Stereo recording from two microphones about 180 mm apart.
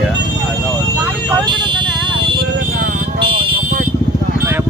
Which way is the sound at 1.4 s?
25° right (ahead or behind).